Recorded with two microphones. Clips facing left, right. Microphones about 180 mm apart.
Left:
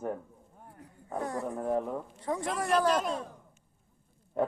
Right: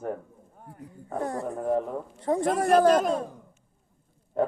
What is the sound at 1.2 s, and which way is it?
A man's voice, 45° right (ahead or behind).